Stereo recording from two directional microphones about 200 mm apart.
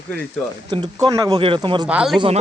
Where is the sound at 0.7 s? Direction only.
20° right (ahead or behind).